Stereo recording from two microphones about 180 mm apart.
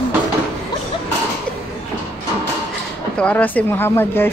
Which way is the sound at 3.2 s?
5° left (ahead or behind).